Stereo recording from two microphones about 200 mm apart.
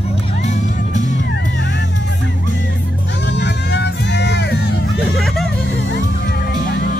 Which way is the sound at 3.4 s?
55° left (ahead or behind).